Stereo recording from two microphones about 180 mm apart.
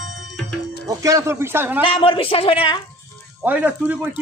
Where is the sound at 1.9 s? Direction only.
30° left (ahead or behind).